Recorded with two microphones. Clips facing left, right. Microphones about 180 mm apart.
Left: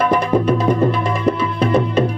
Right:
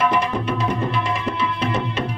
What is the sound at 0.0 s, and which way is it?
Music, 40° left (ahead or behind).